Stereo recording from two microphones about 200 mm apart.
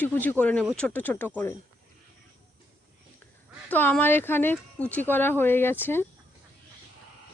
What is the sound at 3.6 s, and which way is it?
Speech, 10° left (ahead or behind).